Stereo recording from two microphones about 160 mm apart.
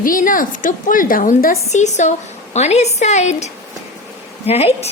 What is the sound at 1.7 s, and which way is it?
A woman's voice, 45° left (ahead or behind).